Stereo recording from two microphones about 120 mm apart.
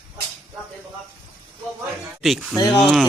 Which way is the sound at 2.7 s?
5° left (ahead or behind).